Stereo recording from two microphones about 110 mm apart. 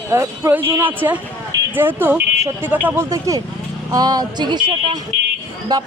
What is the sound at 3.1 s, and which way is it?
Speech, 30° right (ahead or behind).